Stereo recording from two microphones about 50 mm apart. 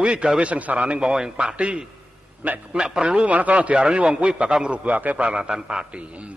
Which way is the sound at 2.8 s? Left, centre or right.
Centre.